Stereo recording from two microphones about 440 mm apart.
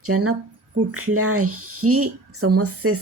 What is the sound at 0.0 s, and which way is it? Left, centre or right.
A woman's voice, right.